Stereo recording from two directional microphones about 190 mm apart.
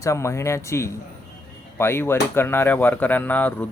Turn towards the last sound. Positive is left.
turn(degrees=10)  # may be behind; listen again after turning